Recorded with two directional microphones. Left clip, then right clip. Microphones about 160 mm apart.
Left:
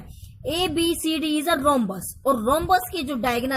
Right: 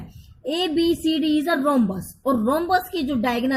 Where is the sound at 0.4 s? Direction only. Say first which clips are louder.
Right 2 dB; 45° left (ahead or behind).